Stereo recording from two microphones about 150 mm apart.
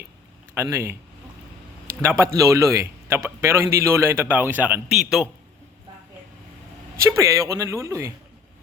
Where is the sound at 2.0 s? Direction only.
20° right (ahead or behind).